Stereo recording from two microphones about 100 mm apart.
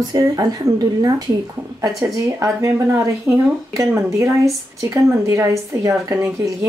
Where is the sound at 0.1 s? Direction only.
40° right (ahead or behind).